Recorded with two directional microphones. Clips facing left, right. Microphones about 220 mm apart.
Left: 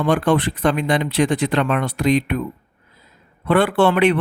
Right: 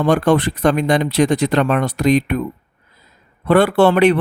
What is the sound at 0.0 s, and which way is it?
A man's voice, 40° right (ahead or behind).